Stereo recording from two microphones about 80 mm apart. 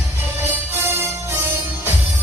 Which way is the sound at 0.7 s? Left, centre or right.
Right.